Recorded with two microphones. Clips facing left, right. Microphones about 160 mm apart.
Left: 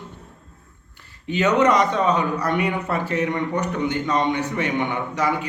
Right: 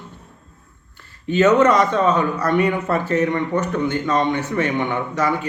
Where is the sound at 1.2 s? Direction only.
15° left (ahead or behind).